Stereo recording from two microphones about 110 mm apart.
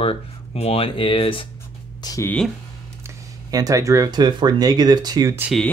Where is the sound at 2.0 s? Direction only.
35° left (ahead or behind).